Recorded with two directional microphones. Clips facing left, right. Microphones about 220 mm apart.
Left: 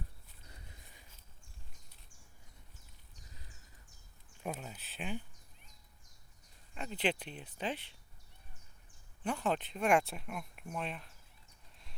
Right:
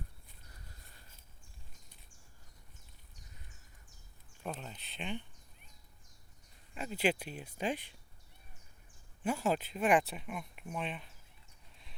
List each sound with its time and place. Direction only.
0.5 s a sound: 15° left (ahead or behind)
4.4 s speech: 10° left (ahead or behind)
6.7 s speech: 5° right (ahead or behind)
9.2 s speech: 10° right (ahead or behind)